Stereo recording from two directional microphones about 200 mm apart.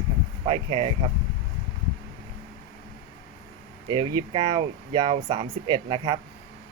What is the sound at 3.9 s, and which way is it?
Speech, 25° right (ahead or behind).